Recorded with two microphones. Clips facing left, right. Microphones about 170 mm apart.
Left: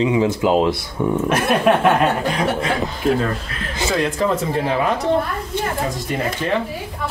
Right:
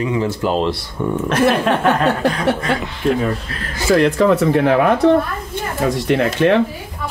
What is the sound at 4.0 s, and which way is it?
Speech, 65° right (ahead or behind).